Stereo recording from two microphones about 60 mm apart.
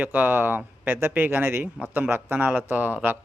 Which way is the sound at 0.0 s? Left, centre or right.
Right.